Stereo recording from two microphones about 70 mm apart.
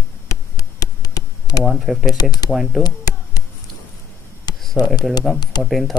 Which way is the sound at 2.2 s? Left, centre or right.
Left.